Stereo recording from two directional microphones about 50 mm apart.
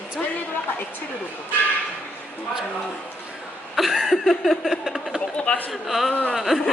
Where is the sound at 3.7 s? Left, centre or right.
Centre.